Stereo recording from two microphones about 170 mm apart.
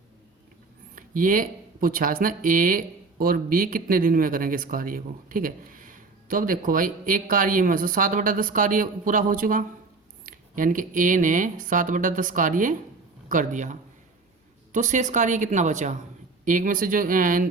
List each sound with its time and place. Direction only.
0.9 s speech: 55° right (ahead or behind)